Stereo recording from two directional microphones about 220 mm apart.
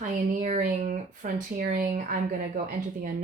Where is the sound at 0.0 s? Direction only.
35° right (ahead or behind).